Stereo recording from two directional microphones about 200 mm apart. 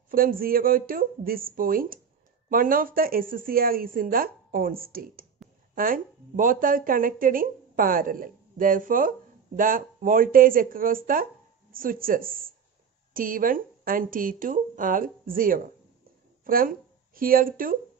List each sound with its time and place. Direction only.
0.1 s speech: 45° right (ahead or behind)